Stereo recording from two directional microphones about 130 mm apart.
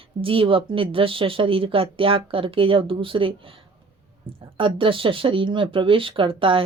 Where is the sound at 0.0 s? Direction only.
45° right (ahead or behind).